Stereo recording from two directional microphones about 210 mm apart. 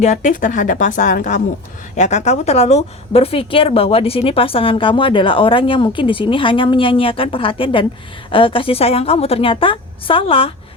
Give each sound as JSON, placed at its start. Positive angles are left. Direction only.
{"t": 0.0, "sound": "a woman's voice", "side_deg": 35}